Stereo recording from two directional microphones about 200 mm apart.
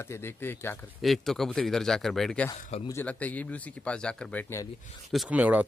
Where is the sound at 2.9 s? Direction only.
10° left (ahead or behind).